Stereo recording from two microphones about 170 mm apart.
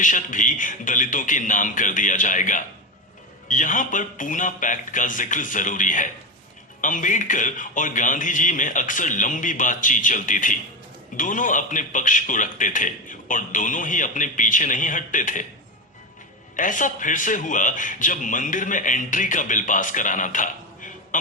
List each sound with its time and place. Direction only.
0.0 s a man's voice: 50° left (ahead or behind)
16.6 s a man's voice: 50° left (ahead or behind)